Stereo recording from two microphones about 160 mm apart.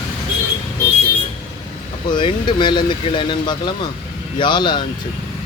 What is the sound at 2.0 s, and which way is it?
Speech, 30° left (ahead or behind).